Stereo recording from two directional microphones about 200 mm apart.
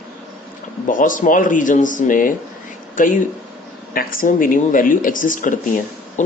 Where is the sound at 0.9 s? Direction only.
40° left (ahead or behind).